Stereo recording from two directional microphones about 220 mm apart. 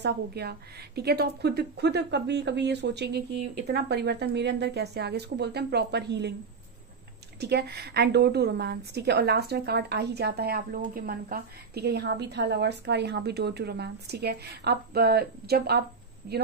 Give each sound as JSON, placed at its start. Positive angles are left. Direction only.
{"t": 0.0, "sound": "a woman's voice", "side_deg": -45}
{"t": 7.3, "sound": "a woman's voice", "side_deg": -50}